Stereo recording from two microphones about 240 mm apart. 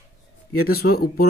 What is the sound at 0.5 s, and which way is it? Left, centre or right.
Speech, left.